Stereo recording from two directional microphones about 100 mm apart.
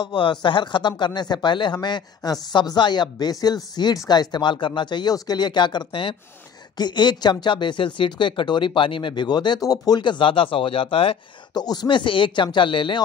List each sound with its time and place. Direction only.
0.0 s speech: 50° left (ahead or behind); by 11.1 s 70° left (ahead or behind)
11.5 s speech: 40° left (ahead or behind)